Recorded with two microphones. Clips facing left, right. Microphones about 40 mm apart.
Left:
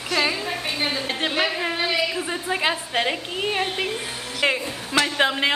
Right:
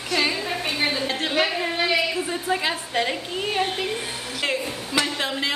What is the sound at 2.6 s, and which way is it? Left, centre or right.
Speech, left.